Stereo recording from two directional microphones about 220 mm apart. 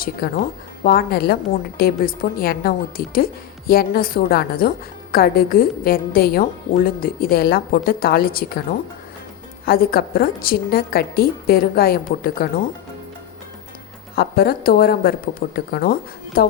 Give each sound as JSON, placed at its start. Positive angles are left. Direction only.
{"t": 0.0, "sound": "a woman's voice", "side_deg": 40}
{"t": 9.6, "sound": "a woman's voice", "side_deg": 45}
{"t": 14.2, "sound": "a woman's voice", "side_deg": 45}